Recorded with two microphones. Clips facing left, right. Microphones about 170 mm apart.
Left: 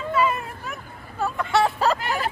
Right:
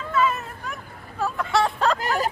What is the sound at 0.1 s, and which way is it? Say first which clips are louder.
Vehicle: even; 10° left (ahead or behind).